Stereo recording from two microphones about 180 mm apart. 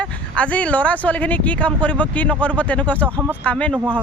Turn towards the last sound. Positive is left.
turn(degrees=5)  # may be behind; listen again after turning